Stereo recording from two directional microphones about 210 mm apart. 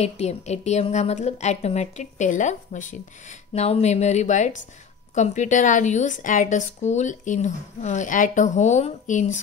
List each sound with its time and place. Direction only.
0.0 s a woman's voice: 30° left (ahead or behind)